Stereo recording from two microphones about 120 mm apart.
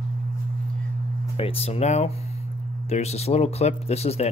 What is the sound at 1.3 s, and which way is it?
Speech, 55° left (ahead or behind).